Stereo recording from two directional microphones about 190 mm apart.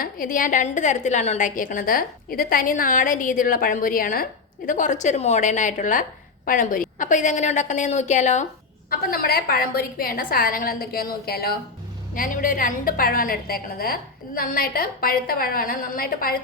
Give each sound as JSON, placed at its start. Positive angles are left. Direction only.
{"t": 0.0, "sound": "a woman's voice", "side_deg": 45}
{"t": 8.9, "sound": "a woman's voice", "side_deg": 50}